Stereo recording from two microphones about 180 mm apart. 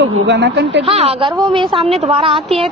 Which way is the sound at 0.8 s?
35° right (ahead or behind).